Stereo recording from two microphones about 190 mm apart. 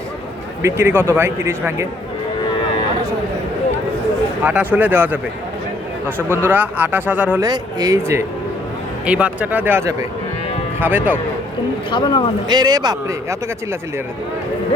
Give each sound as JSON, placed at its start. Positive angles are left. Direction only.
{"t": 0.6, "sound": "speech", "side_deg": -10}
{"t": 4.4, "sound": "speech", "side_deg": -10}
{"t": 6.1, "sound": "speech", "side_deg": 10}
{"t": 6.3, "sound": "speech", "side_deg": -10}
{"t": 7.4, "sound": "speech", "side_deg": -20}
{"t": 11.9, "sound": "speech", "side_deg": 25}
{"t": 12.5, "sound": "a man's voice", "side_deg": -20}